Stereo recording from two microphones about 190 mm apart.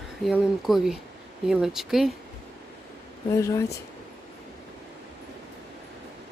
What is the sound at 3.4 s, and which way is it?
Speech, 15° left (ahead or behind).